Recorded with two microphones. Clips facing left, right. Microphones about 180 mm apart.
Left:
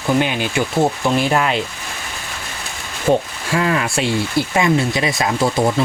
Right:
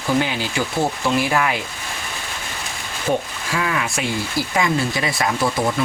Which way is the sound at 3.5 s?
25° left (ahead or behind).